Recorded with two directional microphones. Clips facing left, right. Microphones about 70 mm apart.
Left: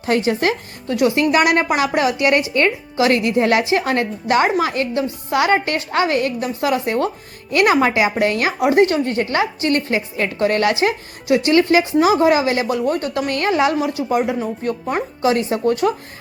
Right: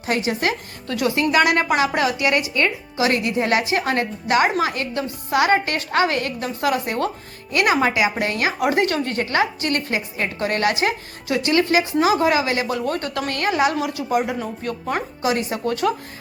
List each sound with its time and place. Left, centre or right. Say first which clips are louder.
0.0 s speech: left 4 dB; left
0.9 s a woman's voice: left 4 dB; left